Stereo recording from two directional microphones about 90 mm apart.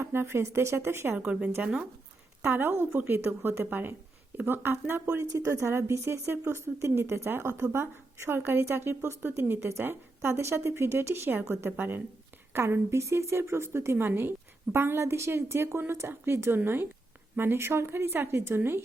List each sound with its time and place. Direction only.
0.0 s a woman's voice: 30° right (ahead or behind)
1.2 s a woman's voice: 15° right (ahead or behind)
2.4 s a woman's voice: 25° right (ahead or behind)
5.0 s a woman's voice: 40° right (ahead or behind)